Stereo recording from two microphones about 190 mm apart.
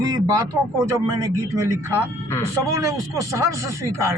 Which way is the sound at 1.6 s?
15° right (ahead or behind).